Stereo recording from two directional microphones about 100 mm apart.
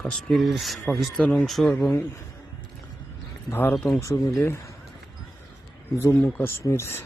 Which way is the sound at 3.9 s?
35° left (ahead or behind).